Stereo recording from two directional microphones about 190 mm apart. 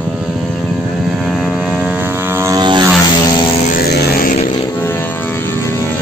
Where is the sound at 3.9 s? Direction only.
55° left (ahead or behind).